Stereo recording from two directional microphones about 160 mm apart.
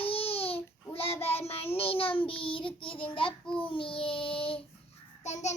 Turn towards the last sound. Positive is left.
turn(degrees=45)  # may be behind; listen again after turning